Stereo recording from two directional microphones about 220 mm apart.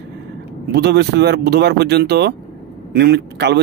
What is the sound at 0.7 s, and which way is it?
Speech, 45° right (ahead or behind).